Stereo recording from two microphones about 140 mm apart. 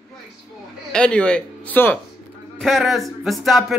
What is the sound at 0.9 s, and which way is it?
Speech, 5° left (ahead or behind).